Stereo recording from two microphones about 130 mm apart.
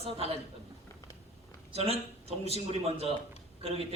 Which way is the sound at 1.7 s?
50° right (ahead or behind).